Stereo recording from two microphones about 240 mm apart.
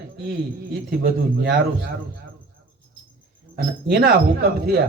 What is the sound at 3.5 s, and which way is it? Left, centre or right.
A man's voice, right.